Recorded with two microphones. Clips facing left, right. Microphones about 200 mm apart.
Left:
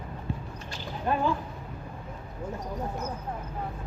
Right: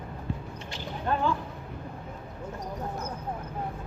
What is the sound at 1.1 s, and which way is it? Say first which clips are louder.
Speech: left 1 dB; 10° left (ahead or behind).